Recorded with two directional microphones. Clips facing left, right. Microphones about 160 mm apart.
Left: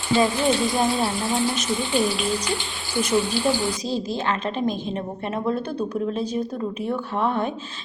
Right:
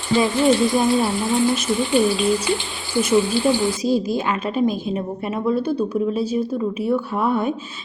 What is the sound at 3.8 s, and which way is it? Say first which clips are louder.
A woman's voice: right 5 dB; 10° right (ahead or behind).